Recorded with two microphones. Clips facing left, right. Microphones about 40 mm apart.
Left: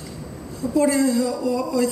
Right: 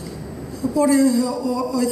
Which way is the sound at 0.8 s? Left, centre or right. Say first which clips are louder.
Right 2 dB; left.